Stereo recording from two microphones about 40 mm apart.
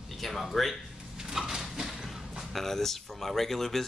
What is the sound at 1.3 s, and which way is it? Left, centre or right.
Dog, centre.